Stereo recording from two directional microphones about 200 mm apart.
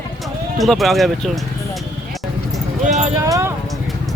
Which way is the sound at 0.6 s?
Centre (ahead or behind).